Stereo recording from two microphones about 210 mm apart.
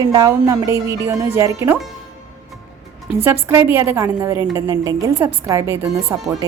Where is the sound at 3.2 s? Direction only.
10° right (ahead or behind).